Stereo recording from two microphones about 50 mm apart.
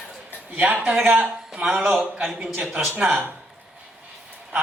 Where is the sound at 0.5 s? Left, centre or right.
Right.